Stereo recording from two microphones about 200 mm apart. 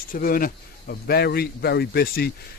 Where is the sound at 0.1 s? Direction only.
45° left (ahead or behind).